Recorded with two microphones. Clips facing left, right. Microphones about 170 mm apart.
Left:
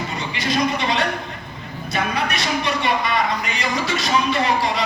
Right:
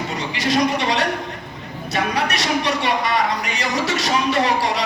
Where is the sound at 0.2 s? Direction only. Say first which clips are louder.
Right 3 dB; 80° right.